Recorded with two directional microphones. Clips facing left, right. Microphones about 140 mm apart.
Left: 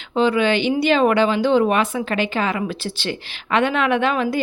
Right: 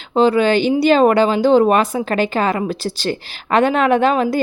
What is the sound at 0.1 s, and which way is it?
A woman's voice, 35° right (ahead or behind).